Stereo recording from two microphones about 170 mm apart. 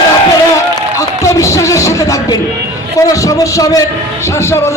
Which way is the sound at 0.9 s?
20° left (ahead or behind).